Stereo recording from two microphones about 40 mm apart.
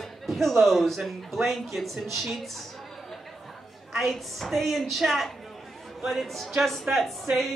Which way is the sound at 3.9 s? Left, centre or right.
Centre.